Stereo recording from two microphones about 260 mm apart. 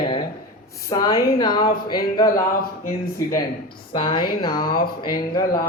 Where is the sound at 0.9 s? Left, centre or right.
Centre.